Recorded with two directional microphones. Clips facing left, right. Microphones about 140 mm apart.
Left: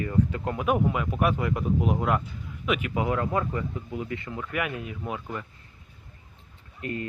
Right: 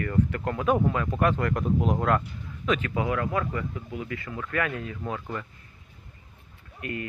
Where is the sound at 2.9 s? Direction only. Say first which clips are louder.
Left 1 dB; 25° left (ahead or behind).